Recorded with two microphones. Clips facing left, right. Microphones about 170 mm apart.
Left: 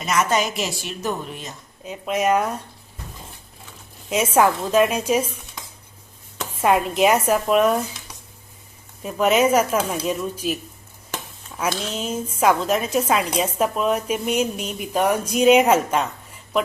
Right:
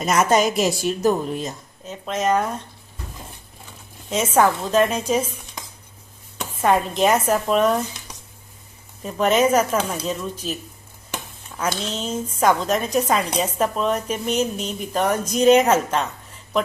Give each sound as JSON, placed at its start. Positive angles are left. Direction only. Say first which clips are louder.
{"t": 0.0, "sound": "a woman's voice", "louder": "right 3 dB", "side_deg": -40}
{"t": 1.8, "sound": "a woman's voice", "louder": "left 2 dB", "side_deg": 10}
{"t": 4.1, "sound": "a woman's voice", "louder": "even", "side_deg": 10}
{"t": 6.6, "sound": "a woman's voice", "louder": "left 1 dB", "side_deg": 10}
{"t": 9.0, "sound": "a woman's voice", "louder": "even", "side_deg": 10}